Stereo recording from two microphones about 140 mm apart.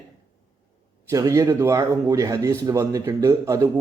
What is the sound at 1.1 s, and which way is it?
Speech, 25° right (ahead or behind).